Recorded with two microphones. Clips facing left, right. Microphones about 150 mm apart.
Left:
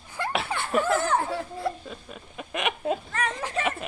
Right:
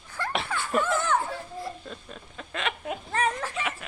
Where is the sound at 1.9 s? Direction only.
10° left (ahead or behind).